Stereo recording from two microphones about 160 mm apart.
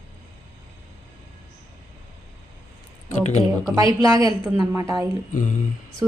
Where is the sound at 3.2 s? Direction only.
45° left (ahead or behind).